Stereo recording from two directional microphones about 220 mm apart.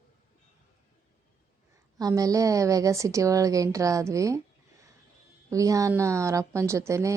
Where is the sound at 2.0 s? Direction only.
15° right (ahead or behind).